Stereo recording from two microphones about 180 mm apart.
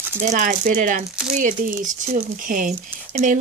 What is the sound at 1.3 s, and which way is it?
Speech, 45° right (ahead or behind).